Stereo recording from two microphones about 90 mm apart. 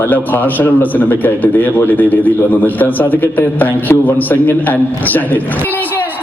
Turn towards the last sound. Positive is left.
turn(degrees=20)  # may be behind; listen again after turning